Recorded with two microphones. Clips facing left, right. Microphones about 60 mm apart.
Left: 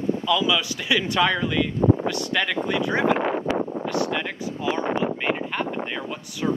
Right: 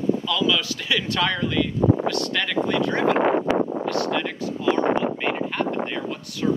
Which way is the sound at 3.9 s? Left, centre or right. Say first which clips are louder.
Right 1 dB; centre.